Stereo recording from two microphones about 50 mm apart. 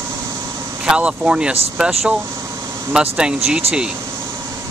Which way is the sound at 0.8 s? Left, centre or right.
Centre.